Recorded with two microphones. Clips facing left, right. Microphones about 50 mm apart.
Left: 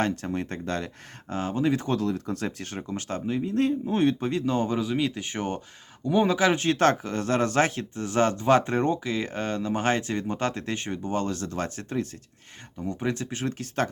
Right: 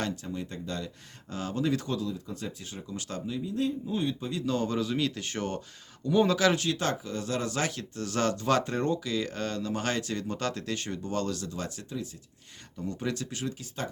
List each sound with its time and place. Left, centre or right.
0.2 s speech: left
1.3 s speech: left
1.9 s speech: left
2.9 s speech: left
4.3 s speech: left
6.7 s speech: left
7.8 s speech: left
12.8 s speech: left
13.5 s speech: left